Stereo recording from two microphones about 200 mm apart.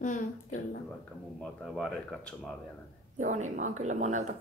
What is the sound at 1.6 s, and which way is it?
Speech, centre (ahead or behind).